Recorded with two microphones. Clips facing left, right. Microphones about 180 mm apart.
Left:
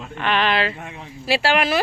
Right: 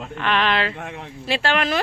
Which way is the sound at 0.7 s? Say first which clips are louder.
Right 3 dB; 70° right (ahead or behind).